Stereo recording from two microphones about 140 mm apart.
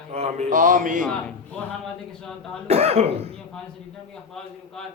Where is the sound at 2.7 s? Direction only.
45° right (ahead or behind).